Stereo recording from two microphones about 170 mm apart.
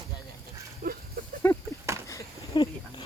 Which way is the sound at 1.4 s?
15° left (ahead or behind).